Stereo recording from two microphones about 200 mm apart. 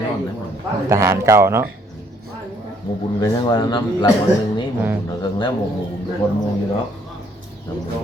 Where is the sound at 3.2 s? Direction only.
20° left (ahead or behind).